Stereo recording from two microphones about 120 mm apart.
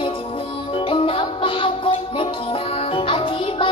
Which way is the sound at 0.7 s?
50° left (ahead or behind).